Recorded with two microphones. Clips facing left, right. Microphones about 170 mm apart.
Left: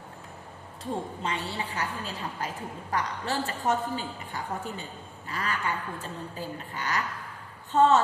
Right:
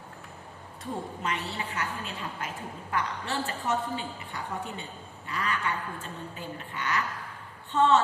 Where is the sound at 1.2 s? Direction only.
30° left (ahead or behind).